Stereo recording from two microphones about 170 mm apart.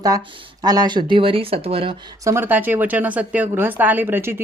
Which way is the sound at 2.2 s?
15° right (ahead or behind).